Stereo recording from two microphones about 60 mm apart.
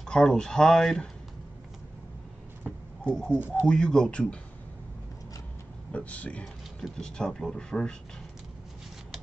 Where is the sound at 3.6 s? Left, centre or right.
Centre.